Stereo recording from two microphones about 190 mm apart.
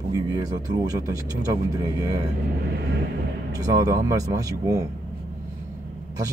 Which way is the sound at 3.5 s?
20° right (ahead or behind).